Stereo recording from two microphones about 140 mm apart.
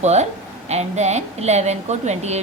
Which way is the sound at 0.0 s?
50° right (ahead or behind).